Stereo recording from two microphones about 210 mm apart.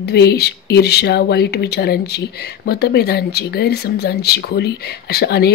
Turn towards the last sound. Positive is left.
turn(degrees=50)  # may be behind; listen again after turning